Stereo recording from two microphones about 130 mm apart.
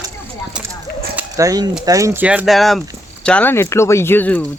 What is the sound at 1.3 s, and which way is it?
Speech, 25° right (ahead or behind).